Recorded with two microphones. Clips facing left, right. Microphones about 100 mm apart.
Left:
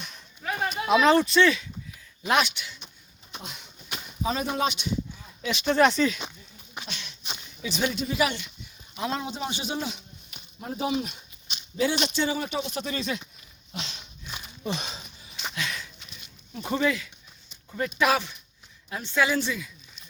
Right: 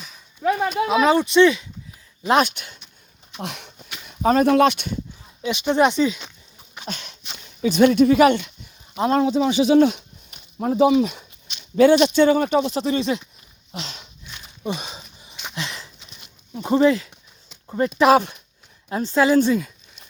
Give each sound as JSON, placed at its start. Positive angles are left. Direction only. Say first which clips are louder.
{"t": 0.9, "sound": "speech", "louder": "even", "side_deg": -10}
{"t": 2.4, "sound": "a man's voice", "louder": "right 6 dB", "side_deg": -50}
{"t": 3.3, "sound": "speech", "louder": "right 9 dB", "side_deg": -75}
{"t": 4.2, "sound": "speech", "louder": "right 12 dB", "side_deg": -55}
{"t": 5.5, "sound": "speech", "louder": "right 3 dB", "side_deg": -15}
{"t": 6.8, "sound": "a sound", "louder": "right 7 dB", "side_deg": -45}
{"t": 7.6, "sound": "a man's voice", "louder": "right 14 dB", "side_deg": -55}
{"t": 9.2, "sound": "speech", "louder": "right 14 dB", "side_deg": -80}
{"t": 10.6, "sound": "speech", "louder": "right 12 dB", "side_deg": -90}
{"t": 11.8, "sound": "a man's voice", "louder": "right 12 dB", "side_deg": -60}
{"t": 12.8, "sound": "speech", "louder": "right 9 dB", "side_deg": -25}
{"t": 14.6, "sound": "a sound", "louder": "right 4 dB", "side_deg": -10}
{"t": 15.5, "sound": "sniff", "louder": "right 3 dB", "side_deg": -30}
{"t": 16.6, "sound": "a woman's voice", "louder": "right 9 dB", "side_deg": -25}